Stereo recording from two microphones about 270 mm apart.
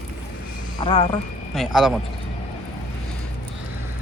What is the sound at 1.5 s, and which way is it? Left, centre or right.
Speech, centre.